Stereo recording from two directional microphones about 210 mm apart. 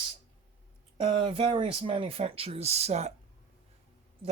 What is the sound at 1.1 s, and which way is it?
Speech, 25° right (ahead or behind).